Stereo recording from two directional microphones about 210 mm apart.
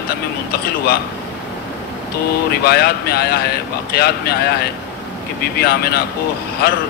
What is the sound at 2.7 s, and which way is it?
Speech, 50° left (ahead or behind).